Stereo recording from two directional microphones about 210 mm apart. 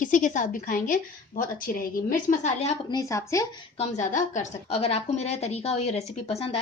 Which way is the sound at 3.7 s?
35° left (ahead or behind).